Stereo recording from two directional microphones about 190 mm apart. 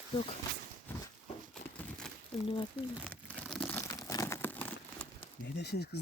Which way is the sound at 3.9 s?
20° left (ahead or behind).